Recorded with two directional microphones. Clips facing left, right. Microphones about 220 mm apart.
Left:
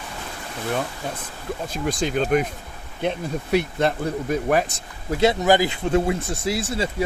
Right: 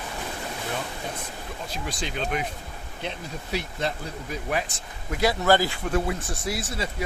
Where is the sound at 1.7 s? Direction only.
45° left (ahead or behind).